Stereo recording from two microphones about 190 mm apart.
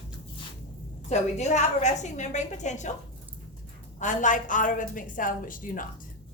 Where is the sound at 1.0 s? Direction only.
35° left (ahead or behind).